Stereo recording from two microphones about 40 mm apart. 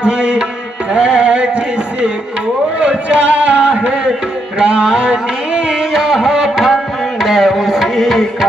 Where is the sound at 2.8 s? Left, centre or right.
Right.